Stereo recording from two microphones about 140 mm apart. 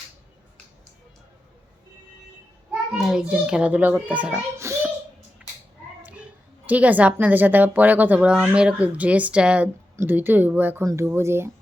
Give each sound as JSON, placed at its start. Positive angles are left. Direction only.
{"t": 2.9, "sound": "a child's voice", "side_deg": -5}
{"t": 4.5, "sound": "child singing", "side_deg": -20}
{"t": 6.7, "sound": "a child's voice", "side_deg": -10}